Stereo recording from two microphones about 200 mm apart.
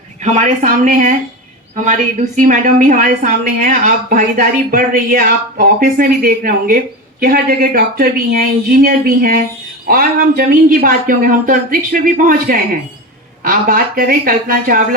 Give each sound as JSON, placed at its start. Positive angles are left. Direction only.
{"t": 0.2, "sound": "a woman's voice", "side_deg": -35}